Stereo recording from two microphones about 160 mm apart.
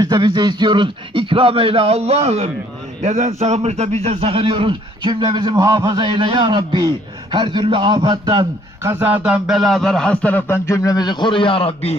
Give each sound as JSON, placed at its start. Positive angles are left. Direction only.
{"t": 0.0, "sound": "a man's voice", "side_deg": -25}
{"t": 8.9, "sound": "a man's voice", "side_deg": -10}